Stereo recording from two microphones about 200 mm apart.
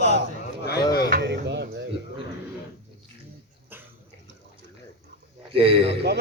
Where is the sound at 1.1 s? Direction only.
60° right (ahead or behind).